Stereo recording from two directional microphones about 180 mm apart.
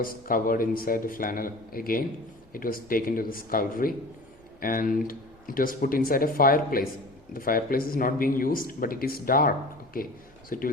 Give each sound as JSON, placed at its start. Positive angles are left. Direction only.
{"t": 0.0, "sound": "speech", "side_deg": 50}